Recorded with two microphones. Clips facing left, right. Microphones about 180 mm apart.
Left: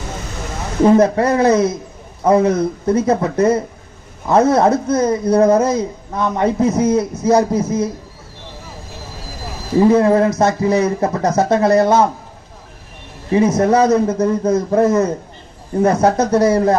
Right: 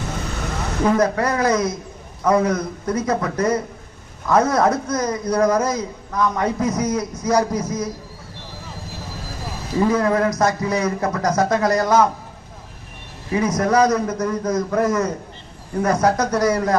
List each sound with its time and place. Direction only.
0.9 s a man's voice: 30° left (ahead or behind)
9.8 s a man's voice: 25° left (ahead or behind)
13.3 s a man's voice: 25° left (ahead or behind)